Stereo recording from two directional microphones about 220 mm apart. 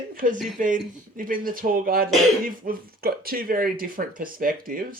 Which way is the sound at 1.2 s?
40° right (ahead or behind).